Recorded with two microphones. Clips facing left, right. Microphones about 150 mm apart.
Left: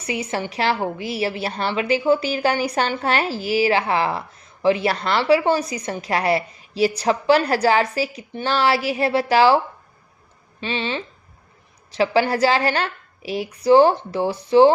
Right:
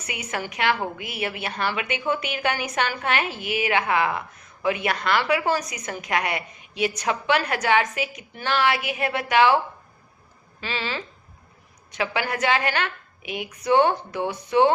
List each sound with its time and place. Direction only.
0.0 s a woman's voice: 30° left (ahead or behind)
10.6 s a woman's voice: 25° left (ahead or behind)